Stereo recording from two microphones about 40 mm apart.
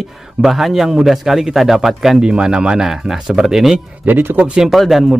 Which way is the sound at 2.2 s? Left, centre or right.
Centre.